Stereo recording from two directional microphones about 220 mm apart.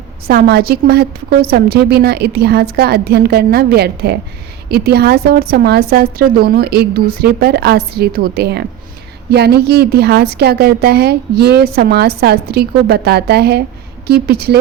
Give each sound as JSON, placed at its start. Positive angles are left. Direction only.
{"t": 0.3, "sound": "a woman's voice", "side_deg": -45}